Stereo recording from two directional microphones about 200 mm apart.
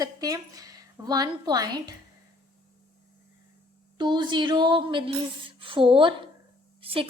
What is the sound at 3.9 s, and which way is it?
A woman's voice, 20° right (ahead or behind).